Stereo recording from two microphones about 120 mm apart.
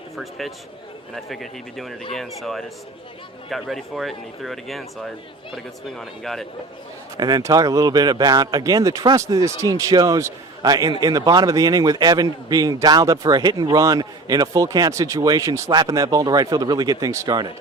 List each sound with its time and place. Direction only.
0.2 s speech: centre (ahead or behind)
6.0 s speech: centre (ahead or behind)
7.2 s a man's voice: 35° right (ahead or behind)